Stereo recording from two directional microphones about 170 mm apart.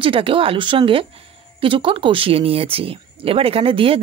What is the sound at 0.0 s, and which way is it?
A woman's voice, 30° right (ahead or behind).